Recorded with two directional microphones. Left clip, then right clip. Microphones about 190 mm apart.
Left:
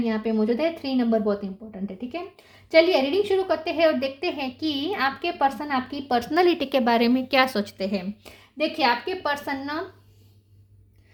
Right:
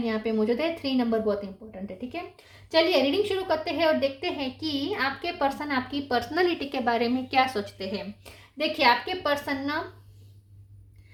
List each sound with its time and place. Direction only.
0.0 s a woman's voice: 35° left (ahead or behind); by 8.3 s 55° left (ahead or behind)
8.5 s a woman's voice: 35° left (ahead or behind)